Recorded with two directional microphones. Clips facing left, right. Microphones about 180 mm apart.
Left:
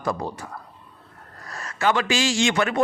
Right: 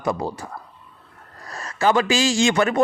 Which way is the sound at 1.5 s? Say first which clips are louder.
Right 3 dB; 35° right (ahead or behind).